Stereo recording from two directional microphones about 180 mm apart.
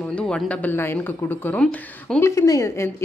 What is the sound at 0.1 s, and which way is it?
A woman's voice, 5° left (ahead or behind).